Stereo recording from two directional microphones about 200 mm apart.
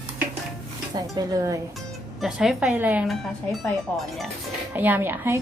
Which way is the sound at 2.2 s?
Centre (ahead or behind).